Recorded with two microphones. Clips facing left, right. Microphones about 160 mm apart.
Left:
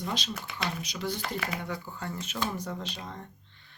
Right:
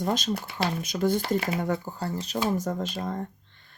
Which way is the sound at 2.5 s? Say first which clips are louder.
Right 8 dB; 45° right (ahead or behind).